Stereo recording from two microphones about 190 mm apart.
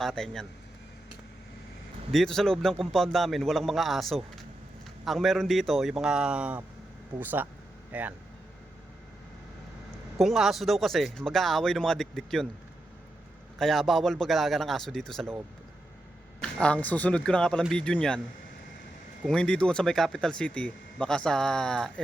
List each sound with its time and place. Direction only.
0.0 s speech: centre (ahead or behind)
2.1 s speech: centre (ahead or behind)
10.2 s speech: centre (ahead or behind)
13.6 s speech: centre (ahead or behind)
16.4 s speech: 5° left (ahead or behind)
19.2 s speech: 5° left (ahead or behind)